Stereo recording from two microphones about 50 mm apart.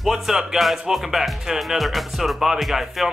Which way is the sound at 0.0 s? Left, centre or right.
Centre.